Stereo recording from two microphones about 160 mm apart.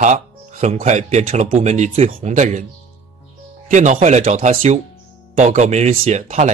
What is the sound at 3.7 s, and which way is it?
Speech, 50° right (ahead or behind).